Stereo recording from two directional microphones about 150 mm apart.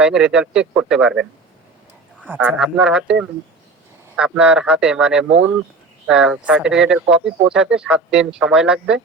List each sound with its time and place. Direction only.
0.0 s speech: 5° right (ahead or behind)